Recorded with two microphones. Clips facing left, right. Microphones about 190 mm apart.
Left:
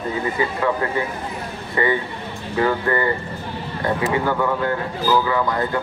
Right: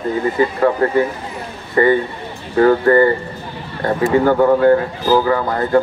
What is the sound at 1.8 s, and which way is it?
Speech, 40° right (ahead or behind).